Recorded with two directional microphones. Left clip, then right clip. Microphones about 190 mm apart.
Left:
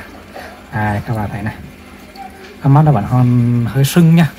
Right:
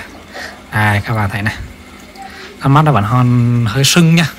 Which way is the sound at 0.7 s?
45° right (ahead or behind).